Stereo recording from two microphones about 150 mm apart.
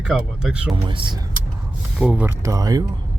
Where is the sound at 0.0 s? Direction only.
5° right (ahead or behind).